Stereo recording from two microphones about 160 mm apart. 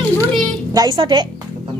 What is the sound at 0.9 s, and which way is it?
Speech, 30° right (ahead or behind).